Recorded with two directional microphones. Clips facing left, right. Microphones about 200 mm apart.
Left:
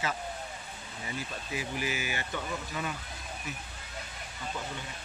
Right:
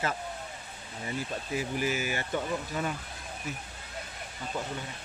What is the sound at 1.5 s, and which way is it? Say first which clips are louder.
Speech: right 4 dB; 45° right (ahead or behind).